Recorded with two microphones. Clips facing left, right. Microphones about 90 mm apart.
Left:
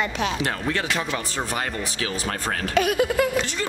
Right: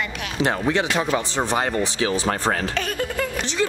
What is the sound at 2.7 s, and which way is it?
Speech, 10° left (ahead or behind).